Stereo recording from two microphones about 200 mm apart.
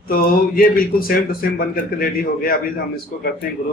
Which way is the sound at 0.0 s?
45° left (ahead or behind).